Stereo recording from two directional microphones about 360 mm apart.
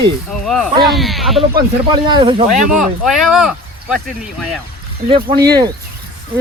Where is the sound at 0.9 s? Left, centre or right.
Centre.